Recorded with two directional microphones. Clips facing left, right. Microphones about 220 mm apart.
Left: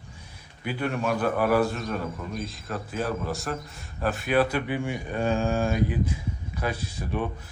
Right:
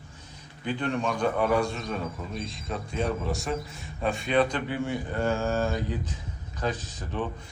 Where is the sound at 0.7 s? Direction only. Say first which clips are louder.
Left 1 dB; 10° left (ahead or behind).